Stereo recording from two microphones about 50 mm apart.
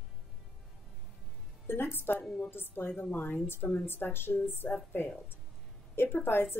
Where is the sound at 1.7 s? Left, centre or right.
Left.